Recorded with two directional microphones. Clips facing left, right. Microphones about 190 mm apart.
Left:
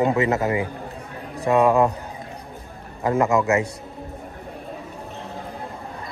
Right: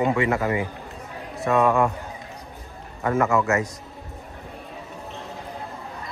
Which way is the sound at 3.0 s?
15° left (ahead or behind).